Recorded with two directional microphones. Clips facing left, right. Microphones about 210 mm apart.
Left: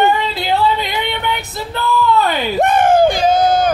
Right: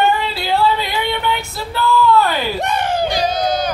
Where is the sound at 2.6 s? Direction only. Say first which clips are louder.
Left 12 dB; 50° left (ahead or behind).